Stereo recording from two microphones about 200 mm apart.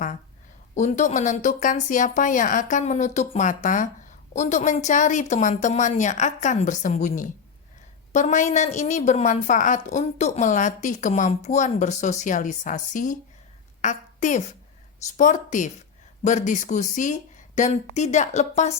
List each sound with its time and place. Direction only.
0.8 s a woman's voice: 35° left (ahead or behind)